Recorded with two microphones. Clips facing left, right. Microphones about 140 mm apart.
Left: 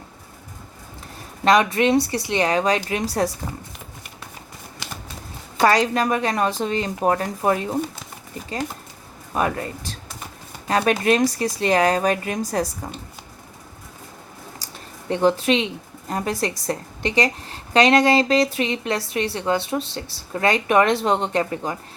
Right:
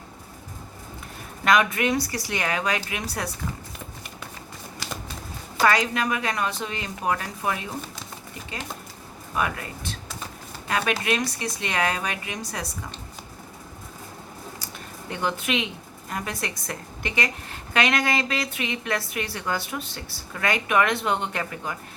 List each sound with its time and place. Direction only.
1.5 s a woman's voice: 30° left (ahead or behind)
5.6 s a woman's voice: 35° left (ahead or behind)
9.3 s a woman's voice: 35° left (ahead or behind)
15.1 s a woman's voice: 30° left (ahead or behind)